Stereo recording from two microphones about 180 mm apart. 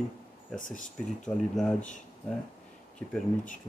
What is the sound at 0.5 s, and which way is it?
Speech, 45° left (ahead or behind).